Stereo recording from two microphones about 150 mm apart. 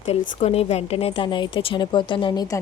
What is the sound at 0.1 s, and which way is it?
A woman's voice, 45° left (ahead or behind).